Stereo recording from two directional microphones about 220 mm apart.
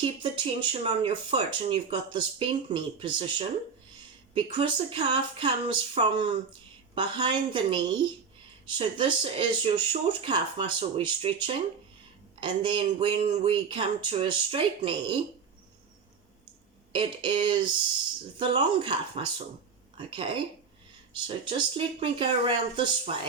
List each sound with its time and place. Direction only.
0.0 s speech: 25° right (ahead or behind)
16.9 s speech: 20° right (ahead or behind)
21.8 s speech: 25° right (ahead or behind)